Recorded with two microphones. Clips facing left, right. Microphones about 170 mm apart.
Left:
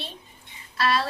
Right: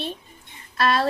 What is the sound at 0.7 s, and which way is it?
Speech, 50° right (ahead or behind).